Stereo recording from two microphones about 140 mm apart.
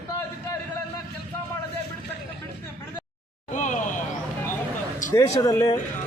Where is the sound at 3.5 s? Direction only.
60° left (ahead or behind).